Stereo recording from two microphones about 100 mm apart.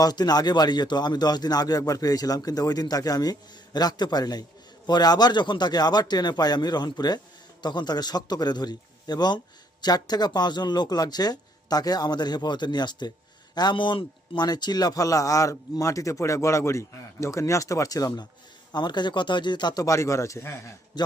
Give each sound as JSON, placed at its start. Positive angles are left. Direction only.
{"t": 0.0, "sound": "a man's voice", "side_deg": 40}
{"t": 20.9, "sound": "a man's voice", "side_deg": 45}